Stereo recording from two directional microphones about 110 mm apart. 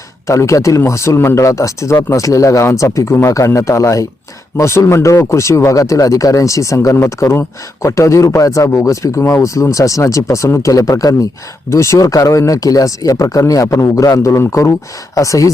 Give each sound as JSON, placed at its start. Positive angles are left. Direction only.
{"t": 0.3, "sound": "speech", "side_deg": 30}